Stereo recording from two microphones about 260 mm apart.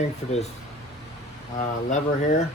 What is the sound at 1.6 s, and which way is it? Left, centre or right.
Speech, left.